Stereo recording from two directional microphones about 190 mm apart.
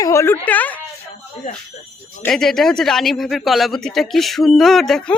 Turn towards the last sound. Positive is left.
turn(degrees=5)  # may be behind; listen again after turning